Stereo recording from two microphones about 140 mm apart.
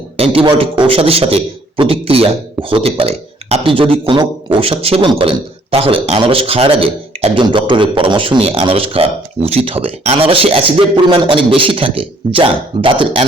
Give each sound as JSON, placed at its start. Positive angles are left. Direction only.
{"t": 0.2, "sound": "a man's voice", "side_deg": -40}